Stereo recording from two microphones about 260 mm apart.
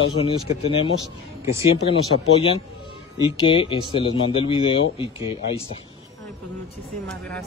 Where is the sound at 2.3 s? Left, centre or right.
Left.